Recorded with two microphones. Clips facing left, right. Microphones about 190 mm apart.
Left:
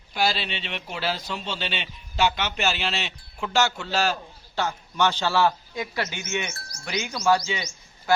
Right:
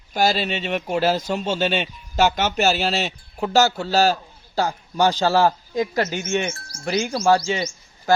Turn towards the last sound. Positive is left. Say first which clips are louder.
# right 4 dB
turn(degrees=-40)  # may be behind; listen again after turning